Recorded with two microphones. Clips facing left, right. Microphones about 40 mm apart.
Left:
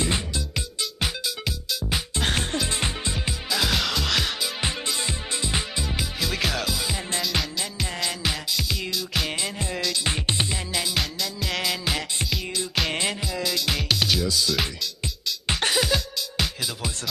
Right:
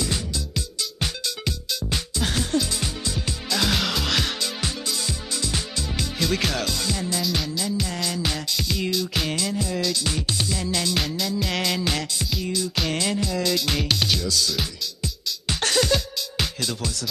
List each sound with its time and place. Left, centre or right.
0.0 s music: left
1.0 s music: centre
2.1 s music: left
3.4 s music: centre
4.6 s music: left
5.9 s music: centre
7.5 s music: left
8.2 s music: centre
9.3 s music: left
10.7 s music: centre
11.0 s music: centre
12.9 s music: left
13.2 s music: centre
14.2 s music: centre